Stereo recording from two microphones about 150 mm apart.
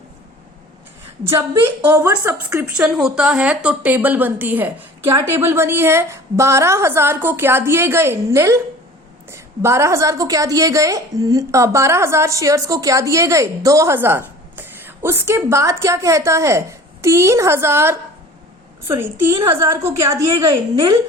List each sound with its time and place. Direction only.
1.2 s a woman's voice: 15° right (ahead or behind)